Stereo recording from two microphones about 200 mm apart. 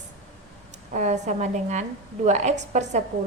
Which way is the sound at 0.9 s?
35° right (ahead or behind).